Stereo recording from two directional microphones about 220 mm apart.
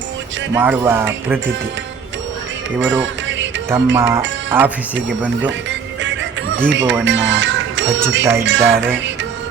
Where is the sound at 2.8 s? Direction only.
55° right (ahead or behind).